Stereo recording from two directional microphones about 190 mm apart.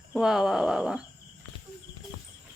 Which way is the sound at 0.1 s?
Centre (ahead or behind).